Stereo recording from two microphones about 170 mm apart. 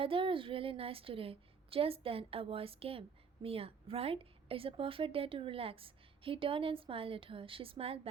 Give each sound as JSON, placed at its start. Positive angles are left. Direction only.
{"t": 0.0, "sound": "a woman's voice", "side_deg": -30}